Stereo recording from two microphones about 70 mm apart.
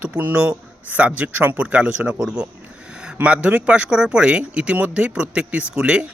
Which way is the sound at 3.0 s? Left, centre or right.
Centre.